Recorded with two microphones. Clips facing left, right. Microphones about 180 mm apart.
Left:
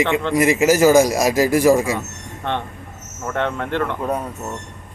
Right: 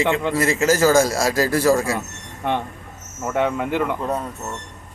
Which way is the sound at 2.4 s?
10° right (ahead or behind).